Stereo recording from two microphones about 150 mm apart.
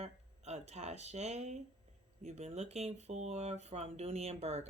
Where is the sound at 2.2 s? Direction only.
45° right (ahead or behind).